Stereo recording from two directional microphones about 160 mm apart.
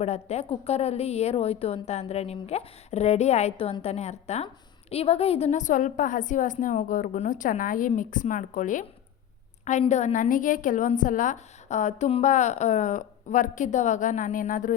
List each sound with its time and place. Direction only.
0.0 s a woman's voice: 40° left (ahead or behind)